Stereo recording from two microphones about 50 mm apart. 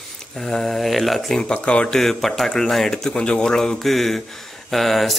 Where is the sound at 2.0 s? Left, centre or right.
Centre.